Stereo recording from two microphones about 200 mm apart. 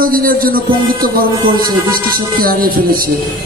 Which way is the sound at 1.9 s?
45° right (ahead or behind).